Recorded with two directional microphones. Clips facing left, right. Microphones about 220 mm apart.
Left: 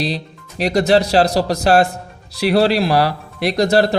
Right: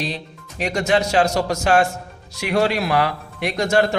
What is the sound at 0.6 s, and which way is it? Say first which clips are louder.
Speech: left 5 dB; 35° left (ahead or behind).